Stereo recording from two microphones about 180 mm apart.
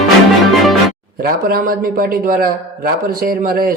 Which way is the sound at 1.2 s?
55° right (ahead or behind).